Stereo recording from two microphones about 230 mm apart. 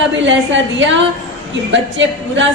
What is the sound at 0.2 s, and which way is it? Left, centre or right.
A woman's voice, right.